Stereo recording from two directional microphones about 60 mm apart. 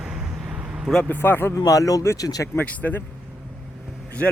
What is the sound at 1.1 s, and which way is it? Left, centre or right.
Speech, left.